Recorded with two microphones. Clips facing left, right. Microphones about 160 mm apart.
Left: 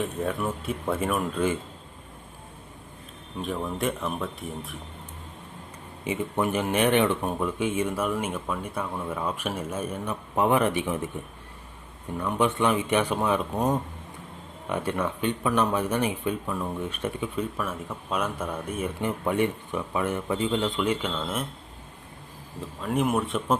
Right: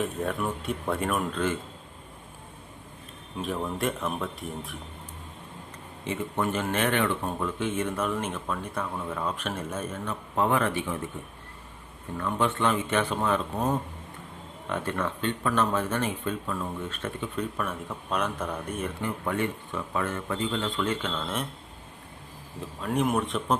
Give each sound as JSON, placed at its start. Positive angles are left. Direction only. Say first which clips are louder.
{"t": 0.0, "sound": "speech", "louder": "left 1 dB", "side_deg": 0}
{"t": 3.4, "sound": "speech", "louder": "left 1 dB", "side_deg": 0}
{"t": 6.1, "sound": "speech", "louder": "left 2 dB", "side_deg": 15}
{"t": 12.1, "sound": "speech", "louder": "left 2 dB", "side_deg": 15}
{"t": 19.0, "sound": "speech", "louder": "left 5 dB", "side_deg": 20}
{"t": 22.8, "sound": "speech", "louder": "left 1 dB", "side_deg": 0}